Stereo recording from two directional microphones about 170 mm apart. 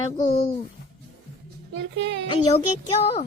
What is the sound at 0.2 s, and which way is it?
Speech, 40° left (ahead or behind).